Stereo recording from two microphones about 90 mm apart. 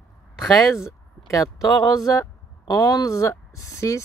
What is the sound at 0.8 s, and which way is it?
Speech, 35° left (ahead or behind).